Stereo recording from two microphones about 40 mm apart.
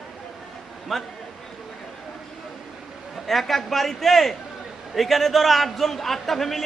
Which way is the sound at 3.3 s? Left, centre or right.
Centre.